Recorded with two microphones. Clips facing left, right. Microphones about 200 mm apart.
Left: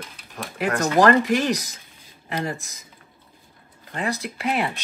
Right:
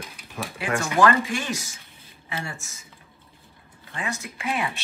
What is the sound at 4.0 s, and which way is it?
Speech, 35° left (ahead or behind).